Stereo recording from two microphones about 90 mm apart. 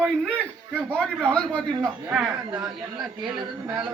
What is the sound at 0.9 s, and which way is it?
A man's voice, 10° left (ahead or behind).